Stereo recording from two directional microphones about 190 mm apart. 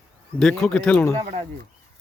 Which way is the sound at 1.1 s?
35° right (ahead or behind).